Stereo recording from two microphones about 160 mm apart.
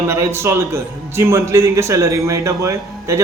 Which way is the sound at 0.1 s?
15° right (ahead or behind).